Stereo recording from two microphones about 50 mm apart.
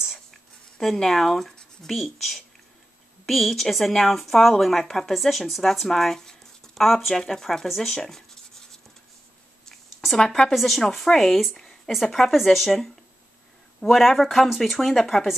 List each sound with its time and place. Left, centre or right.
0.7 s speech: centre
1.5 s a sound: centre
1.9 s speech: centre
7.8 s writing: centre
10.1 s speech: centre
10.5 s speech: centre
11.5 s a sound: centre
11.9 s speech: centre